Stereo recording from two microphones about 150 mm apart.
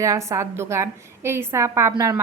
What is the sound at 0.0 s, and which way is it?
A woman's voice, 20° right (ahead or behind).